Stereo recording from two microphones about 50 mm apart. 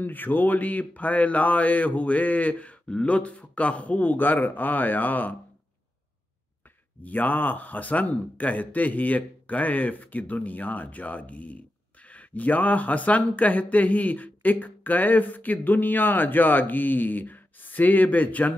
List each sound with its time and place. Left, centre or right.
0.0 s speech: left
7.0 s speech: left